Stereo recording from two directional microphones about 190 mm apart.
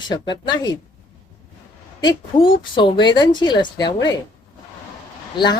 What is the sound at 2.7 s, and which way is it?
A woman's voice, 25° left (ahead or behind).